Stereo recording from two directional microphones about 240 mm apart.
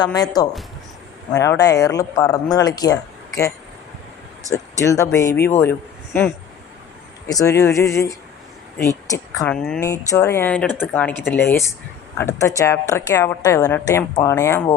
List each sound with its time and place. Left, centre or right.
0.0 s a woman's voice: centre
4.5 s a woman's voice: centre
7.3 s a woman's voice: centre